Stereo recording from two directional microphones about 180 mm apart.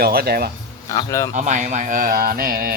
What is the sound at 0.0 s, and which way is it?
Speech, 60° right (ahead or behind).